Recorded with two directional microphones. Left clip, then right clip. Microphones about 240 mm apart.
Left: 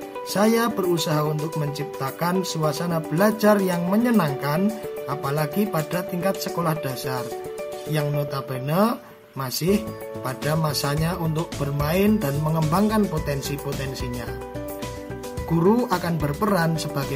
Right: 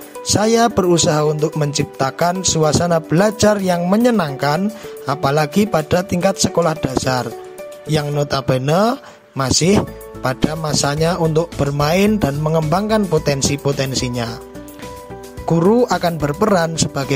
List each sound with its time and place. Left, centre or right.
0.3 s speech: right
15.5 s speech: right